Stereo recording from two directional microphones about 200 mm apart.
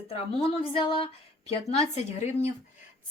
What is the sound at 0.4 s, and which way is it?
A woman's voice, 25° left (ahead or behind).